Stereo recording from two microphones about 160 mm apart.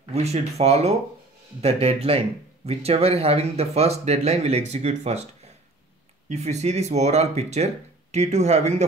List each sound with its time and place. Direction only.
0.1 s speech: 40° right (ahead or behind)